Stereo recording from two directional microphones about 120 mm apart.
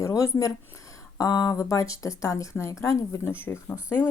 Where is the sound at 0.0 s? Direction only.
25° left (ahead or behind).